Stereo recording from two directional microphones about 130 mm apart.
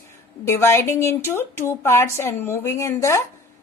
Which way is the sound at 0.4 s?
20° left (ahead or behind).